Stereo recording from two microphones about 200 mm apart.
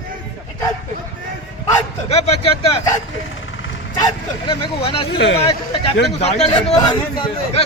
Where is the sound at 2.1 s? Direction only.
30° left (ahead or behind).